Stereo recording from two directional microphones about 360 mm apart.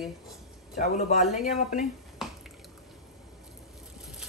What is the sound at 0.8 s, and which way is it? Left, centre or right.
Speech, centre.